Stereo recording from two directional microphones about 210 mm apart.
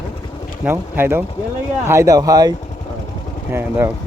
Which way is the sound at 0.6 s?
10° right (ahead or behind).